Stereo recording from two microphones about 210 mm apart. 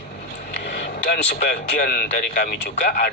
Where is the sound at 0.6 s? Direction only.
45° left (ahead or behind).